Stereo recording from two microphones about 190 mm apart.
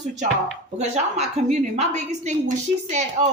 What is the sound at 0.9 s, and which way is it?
A woman's voice, 35° right (ahead or behind).